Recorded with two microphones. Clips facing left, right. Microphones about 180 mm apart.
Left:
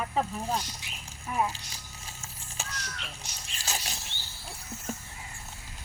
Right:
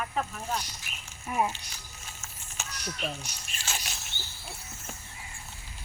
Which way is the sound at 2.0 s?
30° left (ahead or behind).